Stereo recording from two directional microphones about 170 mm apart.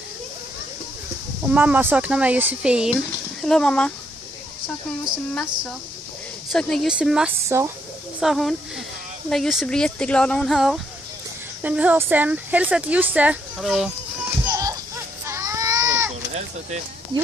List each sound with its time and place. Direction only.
1.4 s speech: 10° right (ahead or behind)
6.5 s speech: centre (ahead or behind)
7.4 s speech: 15° right (ahead or behind)
8.2 s speech: centre (ahead or behind)
14.4 s music: 20° right (ahead or behind)
15.2 s baby cry: 15° right (ahead or behind)